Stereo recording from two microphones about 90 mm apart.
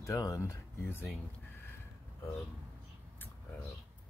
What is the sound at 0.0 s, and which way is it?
Speech, 35° left (ahead or behind).